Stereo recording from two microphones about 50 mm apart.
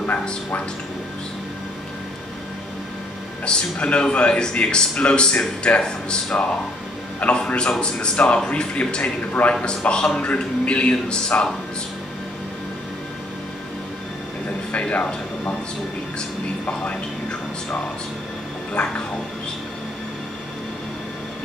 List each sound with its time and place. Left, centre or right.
3.4 s speech: left
14.7 s speech: left
18.7 s speech: left